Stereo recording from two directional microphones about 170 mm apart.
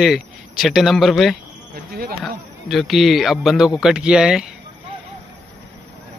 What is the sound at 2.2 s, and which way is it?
Speech, centre (ahead or behind).